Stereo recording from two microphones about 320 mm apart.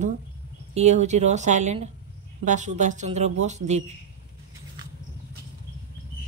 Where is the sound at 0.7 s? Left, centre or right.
Right.